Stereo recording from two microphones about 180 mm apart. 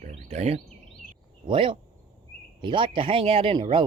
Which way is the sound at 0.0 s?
40° right (ahead or behind).